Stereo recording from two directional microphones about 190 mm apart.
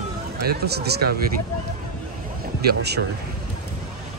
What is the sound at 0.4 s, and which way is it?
Speech, 55° right (ahead or behind).